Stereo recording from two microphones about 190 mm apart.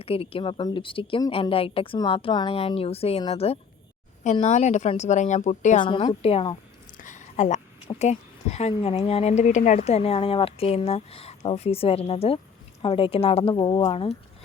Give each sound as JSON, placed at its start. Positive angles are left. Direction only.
{"t": 0.0, "sound": "a woman's voice", "side_deg": 30}
{"t": 5.8, "sound": "a woman's voice", "side_deg": 25}
{"t": 6.9, "sound": "a woman's voice", "side_deg": 40}